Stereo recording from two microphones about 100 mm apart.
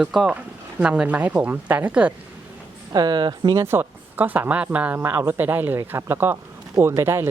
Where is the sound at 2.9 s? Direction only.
45° right (ahead or behind).